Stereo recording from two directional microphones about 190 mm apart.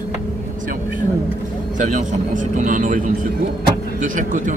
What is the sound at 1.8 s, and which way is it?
Speech, 40° right (ahead or behind).